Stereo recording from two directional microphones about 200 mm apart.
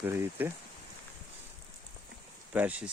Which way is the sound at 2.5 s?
5° right (ahead or behind).